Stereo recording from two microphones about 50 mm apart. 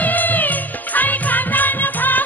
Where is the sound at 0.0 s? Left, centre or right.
Left.